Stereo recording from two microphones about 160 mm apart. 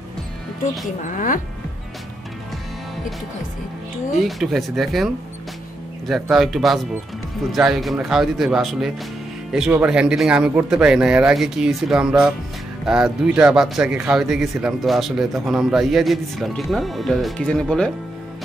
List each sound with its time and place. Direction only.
1.0 s speech: 55° left (ahead or behind)
4.2 s speech: centre (ahead or behind)